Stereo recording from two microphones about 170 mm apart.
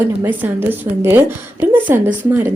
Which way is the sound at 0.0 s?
10° right (ahead or behind).